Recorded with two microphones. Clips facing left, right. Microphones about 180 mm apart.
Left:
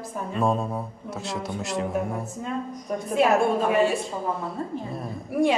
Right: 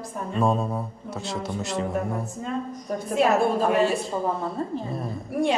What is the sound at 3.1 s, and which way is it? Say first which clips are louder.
Speech: even; centre (ahead or behind).